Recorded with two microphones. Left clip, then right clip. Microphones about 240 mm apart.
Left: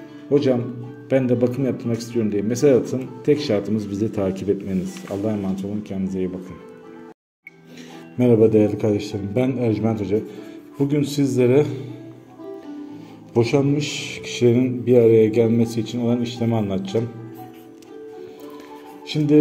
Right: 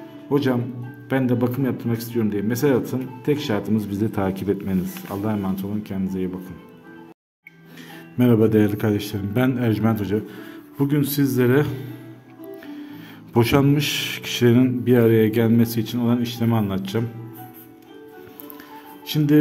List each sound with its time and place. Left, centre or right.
0.3 s a man's voice: centre
8.4 s a man's voice: right
10.9 s a man's voice: right
13.7 s a man's voice: right
19.0 s speech: right